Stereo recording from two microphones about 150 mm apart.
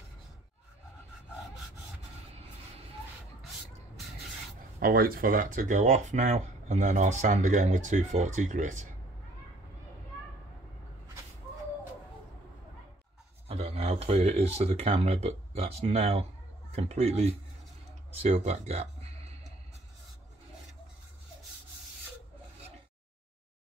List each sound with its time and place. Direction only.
4.7 s speech: 80° right; by 8.8 s 55° right (ahead or behind)
13.5 s speech: 40° right (ahead or behind)